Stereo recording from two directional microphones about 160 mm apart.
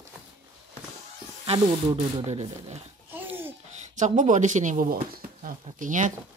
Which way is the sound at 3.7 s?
50° right (ahead or behind).